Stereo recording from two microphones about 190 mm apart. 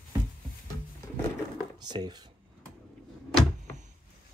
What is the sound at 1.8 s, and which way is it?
Speech, 20° right (ahead or behind).